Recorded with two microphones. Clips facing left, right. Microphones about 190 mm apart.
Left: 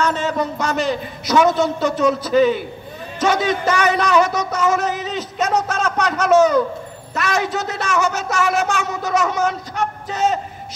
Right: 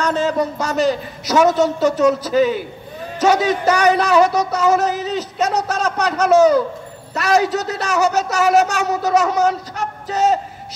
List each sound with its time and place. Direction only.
0.0 s a man's voice: 40° right (ahead or behind)